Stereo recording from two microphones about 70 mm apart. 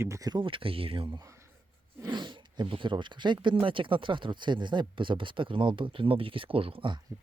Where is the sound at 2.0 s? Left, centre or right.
Right.